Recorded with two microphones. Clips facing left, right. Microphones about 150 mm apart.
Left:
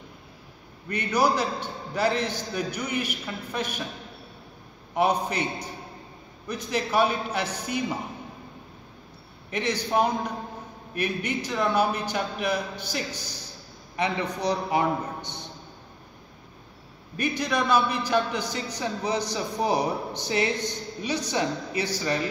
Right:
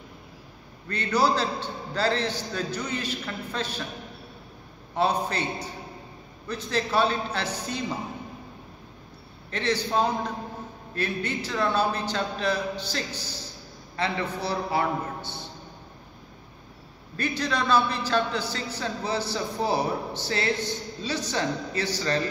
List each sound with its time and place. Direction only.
0.8 s a man's voice: 15° left (ahead or behind)
4.9 s a man's voice: 15° left (ahead or behind)
9.5 s a man's voice: 15° left (ahead or behind)
17.2 s a man's voice: 15° left (ahead or behind)